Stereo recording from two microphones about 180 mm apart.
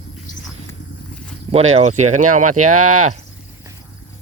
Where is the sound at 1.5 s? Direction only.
35° right (ahead or behind).